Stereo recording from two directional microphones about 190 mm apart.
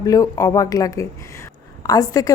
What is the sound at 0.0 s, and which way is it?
A woman's voice, 20° left (ahead or behind).